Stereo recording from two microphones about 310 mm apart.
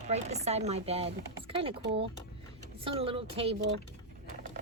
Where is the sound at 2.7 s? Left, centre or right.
Centre.